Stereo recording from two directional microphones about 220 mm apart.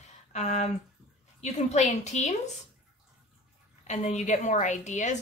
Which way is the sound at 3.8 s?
30° left (ahead or behind).